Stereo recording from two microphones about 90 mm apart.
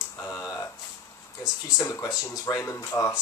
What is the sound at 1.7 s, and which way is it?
Speech, 35° left (ahead or behind).